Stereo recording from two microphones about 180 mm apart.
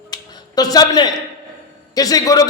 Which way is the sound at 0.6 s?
20° left (ahead or behind).